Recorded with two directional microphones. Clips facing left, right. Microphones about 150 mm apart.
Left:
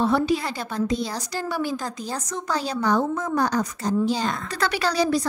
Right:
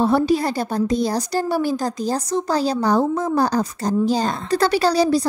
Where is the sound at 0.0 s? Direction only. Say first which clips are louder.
Right 4 dB; 40° right (ahead or behind).